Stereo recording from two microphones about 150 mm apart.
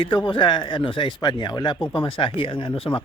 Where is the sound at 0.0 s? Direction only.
35° left (ahead or behind).